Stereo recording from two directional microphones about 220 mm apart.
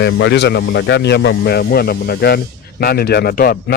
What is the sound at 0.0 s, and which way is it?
Speech, 50° left (ahead or behind).